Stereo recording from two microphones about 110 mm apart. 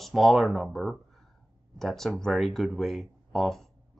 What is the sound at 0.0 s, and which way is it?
Speech, centre (ahead or behind).